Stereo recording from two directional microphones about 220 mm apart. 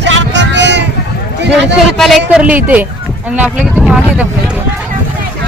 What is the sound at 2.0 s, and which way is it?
Speech, centre (ahead or behind).